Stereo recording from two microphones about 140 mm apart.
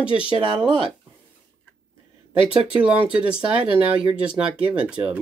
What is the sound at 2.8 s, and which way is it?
Speech, 10° right (ahead or behind).